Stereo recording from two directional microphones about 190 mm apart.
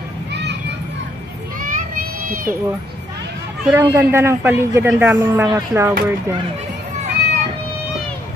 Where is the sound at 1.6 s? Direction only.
45° right (ahead or behind).